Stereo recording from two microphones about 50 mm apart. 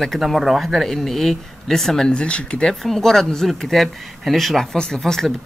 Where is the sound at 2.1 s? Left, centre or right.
Left.